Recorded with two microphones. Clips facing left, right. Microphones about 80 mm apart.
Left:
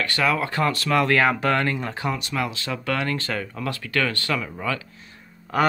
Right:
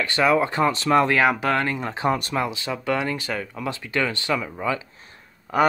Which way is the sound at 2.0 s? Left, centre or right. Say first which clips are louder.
Right 7 dB; right.